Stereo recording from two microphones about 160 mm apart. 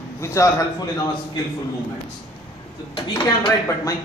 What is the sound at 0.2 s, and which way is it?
Speech, 20° left (ahead or behind).